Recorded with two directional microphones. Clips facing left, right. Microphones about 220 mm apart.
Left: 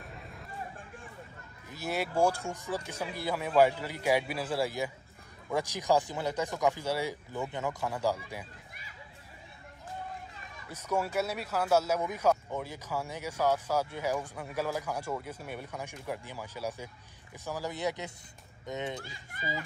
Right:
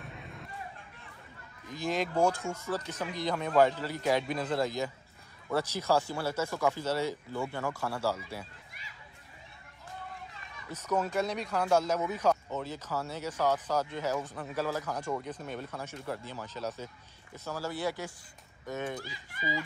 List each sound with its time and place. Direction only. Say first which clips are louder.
1.7 s speech: right 2 dB; 10° left (ahead or behind)
10.7 s speech: right 1 dB; 10° left (ahead or behind)